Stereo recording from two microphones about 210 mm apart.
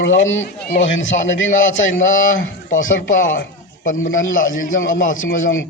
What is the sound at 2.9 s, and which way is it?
A man's voice, 40° left (ahead or behind).